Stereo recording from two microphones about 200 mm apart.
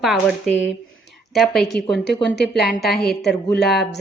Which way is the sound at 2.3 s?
55° left (ahead or behind).